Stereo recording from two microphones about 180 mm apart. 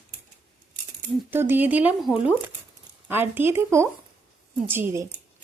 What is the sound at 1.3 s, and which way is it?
Speech, 10° right (ahead or behind).